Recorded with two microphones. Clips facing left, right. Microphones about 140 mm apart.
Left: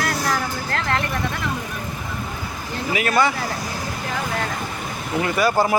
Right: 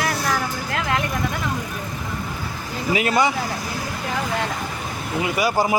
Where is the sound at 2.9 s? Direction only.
20° right (ahead or behind).